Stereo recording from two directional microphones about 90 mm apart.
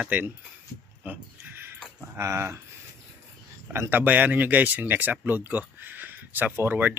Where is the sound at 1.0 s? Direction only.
20° right (ahead or behind).